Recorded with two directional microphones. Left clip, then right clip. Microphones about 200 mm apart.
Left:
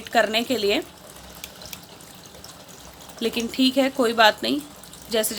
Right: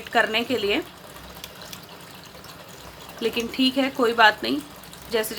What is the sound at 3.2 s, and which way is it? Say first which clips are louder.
A woman's voice: even; 25° left (ahead or behind).